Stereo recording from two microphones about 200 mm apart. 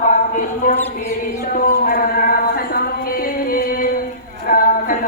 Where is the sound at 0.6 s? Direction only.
45° left (ahead or behind).